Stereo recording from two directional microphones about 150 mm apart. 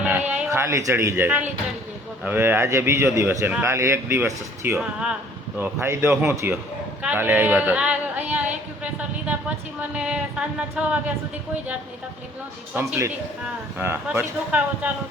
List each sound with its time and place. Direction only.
0.0 s a sound: 10° right (ahead or behind)
2.2 s speech: 15° right (ahead or behind)
4.8 s speech: 5° right (ahead or behind)
5.5 s speech: 15° right (ahead or behind)
7.0 s a sound: 10° right (ahead or behind)
9.9 s speech: 5° right (ahead or behind)
12.7 s speech: 15° right (ahead or behind)